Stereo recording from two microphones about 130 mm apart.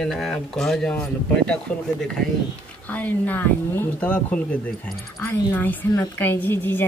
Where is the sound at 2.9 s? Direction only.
10° left (ahead or behind).